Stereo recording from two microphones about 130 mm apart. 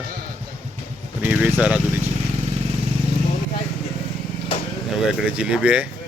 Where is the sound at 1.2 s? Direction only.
15° right (ahead or behind).